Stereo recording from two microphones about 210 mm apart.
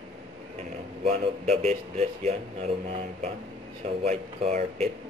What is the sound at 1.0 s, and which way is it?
Speech, 30° right (ahead or behind).